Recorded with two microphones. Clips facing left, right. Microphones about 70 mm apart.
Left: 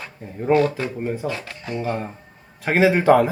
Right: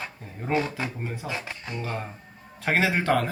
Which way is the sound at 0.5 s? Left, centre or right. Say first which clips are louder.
Left 8 dB; centre.